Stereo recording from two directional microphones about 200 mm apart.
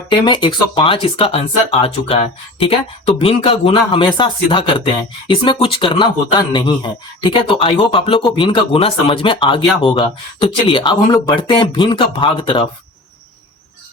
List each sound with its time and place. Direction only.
0.1 s speech: 25° left (ahead or behind)